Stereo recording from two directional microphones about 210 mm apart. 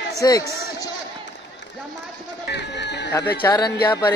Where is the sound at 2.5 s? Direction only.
55° left (ahead or behind).